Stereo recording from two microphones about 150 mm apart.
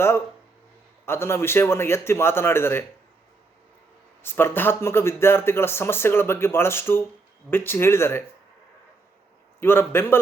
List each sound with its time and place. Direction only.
1.0 s speech: 15° left (ahead or behind)
4.2 s speech: 15° left (ahead or behind)
9.6 s speech: 15° left (ahead or behind)